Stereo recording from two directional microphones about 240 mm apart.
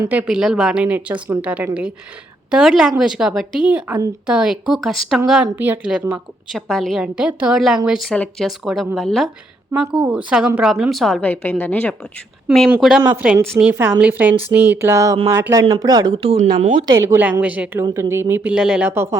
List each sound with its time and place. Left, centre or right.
0.0 s a woman's voice: centre; by 16.7 s right
16.8 s speech: centre